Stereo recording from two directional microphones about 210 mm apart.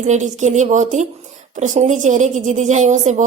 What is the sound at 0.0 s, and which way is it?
A woman's voice, 35° right (ahead or behind).